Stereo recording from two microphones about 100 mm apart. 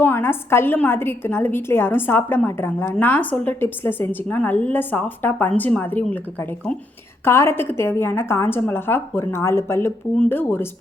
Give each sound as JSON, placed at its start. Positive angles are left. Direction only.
{"t": 0.0, "sound": "a woman's voice", "side_deg": 25}
{"t": 7.3, "sound": "a woman's voice", "side_deg": 25}